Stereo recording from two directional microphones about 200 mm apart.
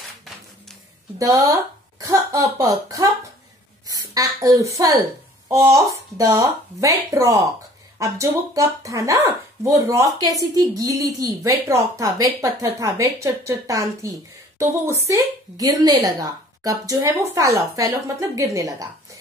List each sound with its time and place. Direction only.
1.1 s a woman's voice: 15° right (ahead or behind)